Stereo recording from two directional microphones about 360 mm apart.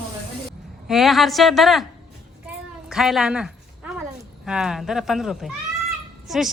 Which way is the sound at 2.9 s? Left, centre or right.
Centre.